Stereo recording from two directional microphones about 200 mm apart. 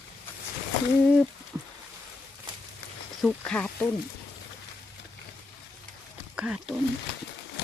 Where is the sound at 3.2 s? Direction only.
Centre (ahead or behind).